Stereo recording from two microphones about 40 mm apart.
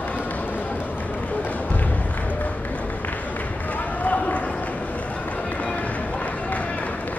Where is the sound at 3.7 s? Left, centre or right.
Left.